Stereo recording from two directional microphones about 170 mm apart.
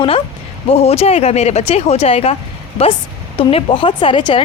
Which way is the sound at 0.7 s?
35° left (ahead or behind).